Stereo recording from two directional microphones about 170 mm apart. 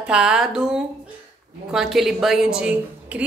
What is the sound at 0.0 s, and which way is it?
A woman's voice, 5° right (ahead or behind).